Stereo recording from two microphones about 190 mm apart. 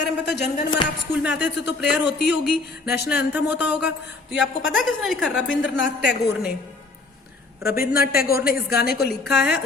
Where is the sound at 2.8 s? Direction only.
60° left (ahead or behind).